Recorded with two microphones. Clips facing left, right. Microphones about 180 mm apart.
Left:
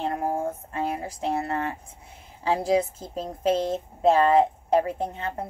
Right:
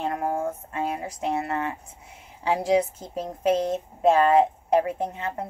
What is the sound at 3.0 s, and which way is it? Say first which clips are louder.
A woman's voice: right 1 dB; 30° left (ahead or behind).